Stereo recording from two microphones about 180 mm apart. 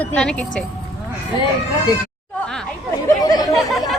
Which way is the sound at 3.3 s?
20° left (ahead or behind).